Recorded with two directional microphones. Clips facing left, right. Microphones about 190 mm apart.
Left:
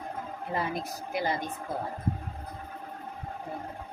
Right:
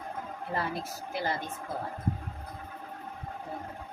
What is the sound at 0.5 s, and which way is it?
Speech, 15° left (ahead or behind).